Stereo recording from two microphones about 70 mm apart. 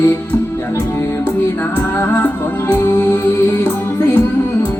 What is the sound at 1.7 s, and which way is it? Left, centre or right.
Music, left.